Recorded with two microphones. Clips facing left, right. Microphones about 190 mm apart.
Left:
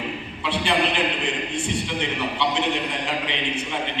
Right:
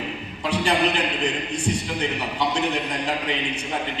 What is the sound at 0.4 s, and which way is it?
Speech, 40° right (ahead or behind).